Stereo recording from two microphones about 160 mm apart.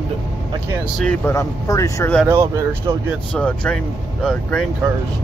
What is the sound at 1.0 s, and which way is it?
Speech, 10° left (ahead or behind).